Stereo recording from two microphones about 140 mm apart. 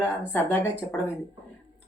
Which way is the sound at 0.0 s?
15° left (ahead or behind).